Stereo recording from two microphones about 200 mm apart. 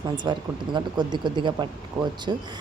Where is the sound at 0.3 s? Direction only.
20° right (ahead or behind).